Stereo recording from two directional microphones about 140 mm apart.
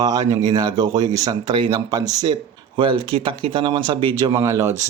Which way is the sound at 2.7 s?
40° right (ahead or behind).